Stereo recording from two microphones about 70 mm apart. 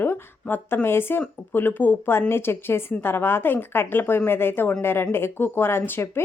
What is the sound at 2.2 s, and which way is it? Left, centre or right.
A woman's voice, left.